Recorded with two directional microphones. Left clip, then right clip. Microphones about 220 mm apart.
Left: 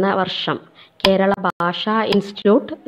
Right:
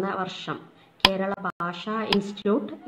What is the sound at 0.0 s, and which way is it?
A woman's voice, 30° left (ahead or behind).